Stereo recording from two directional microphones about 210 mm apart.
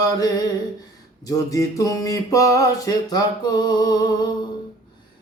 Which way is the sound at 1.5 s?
15° left (ahead or behind).